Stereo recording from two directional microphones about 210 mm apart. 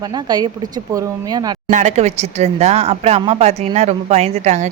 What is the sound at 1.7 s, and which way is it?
A woman's voice, 35° right (ahead or behind).